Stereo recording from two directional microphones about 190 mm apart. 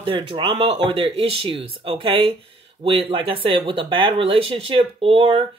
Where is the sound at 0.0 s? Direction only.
25° right (ahead or behind).